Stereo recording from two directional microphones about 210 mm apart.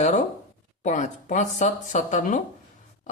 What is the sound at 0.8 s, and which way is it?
Speech, 35° left (ahead or behind).